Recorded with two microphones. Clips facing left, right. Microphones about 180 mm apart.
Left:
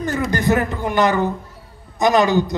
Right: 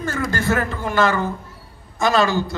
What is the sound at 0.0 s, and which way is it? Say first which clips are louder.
A man's voice: left 3 dB; 20° left (ahead or behind).